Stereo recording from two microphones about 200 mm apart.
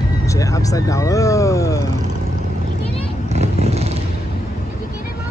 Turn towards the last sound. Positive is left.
turn(degrees=-30)  # may be behind; listen again after turning